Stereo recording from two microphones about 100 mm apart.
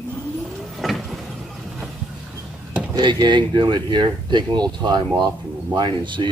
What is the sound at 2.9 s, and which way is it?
Speech, 45° right (ahead or behind).